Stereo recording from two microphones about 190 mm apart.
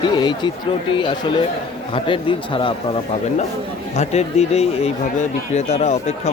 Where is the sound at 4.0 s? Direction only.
35° left (ahead or behind).